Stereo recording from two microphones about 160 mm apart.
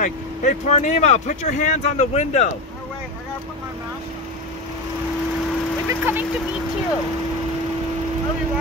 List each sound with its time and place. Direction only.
0.0 s speech: 50° left (ahead or behind)
5.9 s speech: 10° right (ahead or behind)